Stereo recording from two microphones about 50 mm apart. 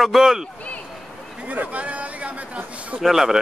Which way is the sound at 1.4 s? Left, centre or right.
Right.